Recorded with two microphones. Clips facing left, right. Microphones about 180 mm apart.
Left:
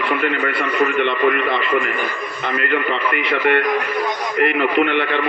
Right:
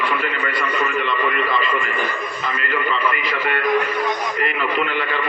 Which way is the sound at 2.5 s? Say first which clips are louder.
Left 4 dB; 65° left (ahead or behind).